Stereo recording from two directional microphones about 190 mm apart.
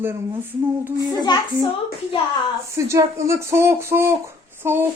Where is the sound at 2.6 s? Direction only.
15° right (ahead or behind).